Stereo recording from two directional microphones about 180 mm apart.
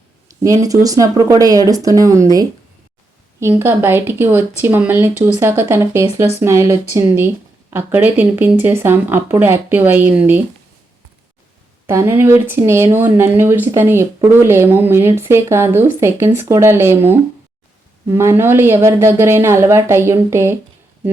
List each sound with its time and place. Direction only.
0.4 s speech: 20° right (ahead or behind)
11.9 s speech: 15° right (ahead or behind)